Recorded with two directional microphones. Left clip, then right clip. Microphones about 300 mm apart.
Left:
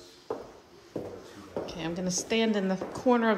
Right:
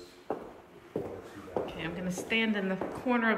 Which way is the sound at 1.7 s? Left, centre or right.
Centre.